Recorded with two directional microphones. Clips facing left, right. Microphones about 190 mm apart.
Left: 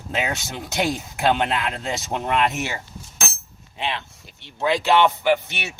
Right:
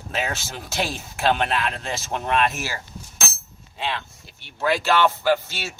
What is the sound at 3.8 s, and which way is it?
Speech, 20° left (ahead or behind).